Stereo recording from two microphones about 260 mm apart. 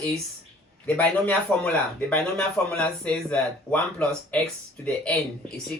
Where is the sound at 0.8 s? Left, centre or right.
Centre.